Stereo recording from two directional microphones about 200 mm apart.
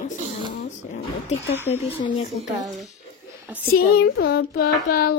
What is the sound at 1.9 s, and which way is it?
Speech, 25° left (ahead or behind).